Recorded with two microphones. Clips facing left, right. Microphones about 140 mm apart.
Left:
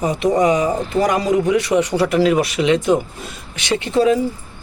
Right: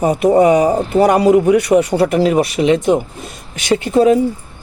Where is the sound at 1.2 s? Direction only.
50° right (ahead or behind).